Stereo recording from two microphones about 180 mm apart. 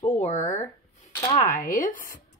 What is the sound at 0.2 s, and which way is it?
Speech, 40° left (ahead or behind).